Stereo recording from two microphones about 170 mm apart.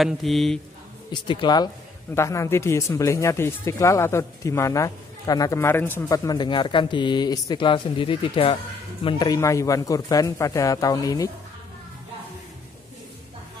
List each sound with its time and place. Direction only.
0.0 s speech: centre (ahead or behind)
1.1 s a man's voice: 30° left (ahead or behind)